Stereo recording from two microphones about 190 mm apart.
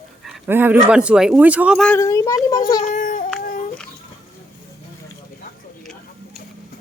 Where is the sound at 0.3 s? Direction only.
10° right (ahead or behind).